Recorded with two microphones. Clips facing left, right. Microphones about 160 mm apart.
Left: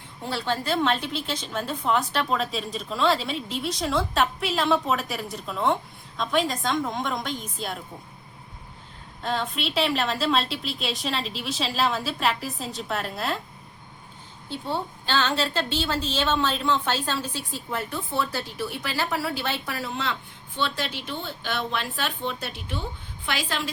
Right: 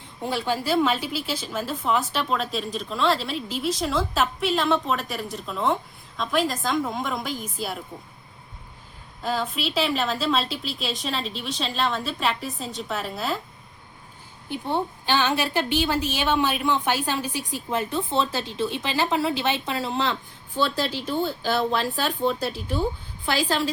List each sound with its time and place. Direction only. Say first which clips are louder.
0.2 s a woman's voice: right 2 dB; 15° right (ahead or behind)
9.2 s a woman's voice: right 1 dB; 5° right (ahead or behind)
14.5 s a woman's voice: right 3 dB; 15° right (ahead or behind); by 23.7 s 35° right (ahead or behind)